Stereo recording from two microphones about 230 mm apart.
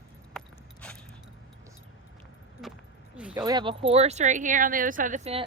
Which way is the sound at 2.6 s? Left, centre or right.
Centre.